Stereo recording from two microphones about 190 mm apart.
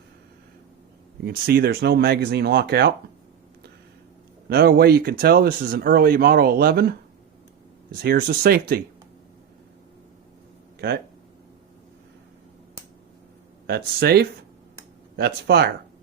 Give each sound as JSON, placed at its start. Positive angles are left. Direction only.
{"t": 1.2, "sound": "speech", "side_deg": -55}
{"t": 4.4, "sound": "speech", "side_deg": -55}
{"t": 10.8, "sound": "speech", "side_deg": -55}
{"t": 13.7, "sound": "speech", "side_deg": -55}